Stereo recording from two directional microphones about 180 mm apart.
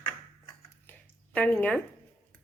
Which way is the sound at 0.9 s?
10° left (ahead or behind).